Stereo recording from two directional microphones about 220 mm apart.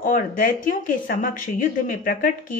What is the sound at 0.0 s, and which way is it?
A woman's voice, 40° left (ahead or behind).